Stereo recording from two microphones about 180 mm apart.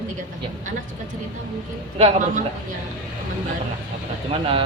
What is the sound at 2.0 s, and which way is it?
Speech, 35° right (ahead or behind).